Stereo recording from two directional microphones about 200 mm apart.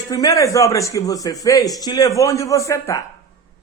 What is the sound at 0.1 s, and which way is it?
Speech, 15° left (ahead or behind).